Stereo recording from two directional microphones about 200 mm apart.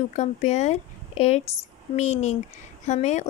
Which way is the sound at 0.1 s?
35° left (ahead or behind).